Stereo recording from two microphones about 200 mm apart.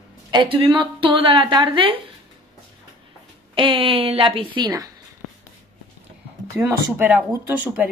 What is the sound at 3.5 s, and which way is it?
Speech, 25° right (ahead or behind).